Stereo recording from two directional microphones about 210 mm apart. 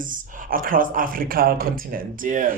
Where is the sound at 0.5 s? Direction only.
40° right (ahead or behind).